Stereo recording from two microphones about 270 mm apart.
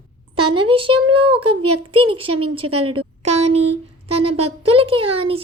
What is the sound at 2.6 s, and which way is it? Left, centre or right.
Speech, right.